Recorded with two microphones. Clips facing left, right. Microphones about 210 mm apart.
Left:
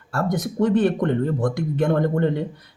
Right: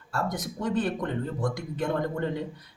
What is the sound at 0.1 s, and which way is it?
Speech, 65° left (ahead or behind).